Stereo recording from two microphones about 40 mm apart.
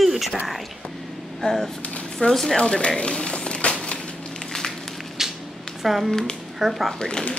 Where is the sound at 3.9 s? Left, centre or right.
Left.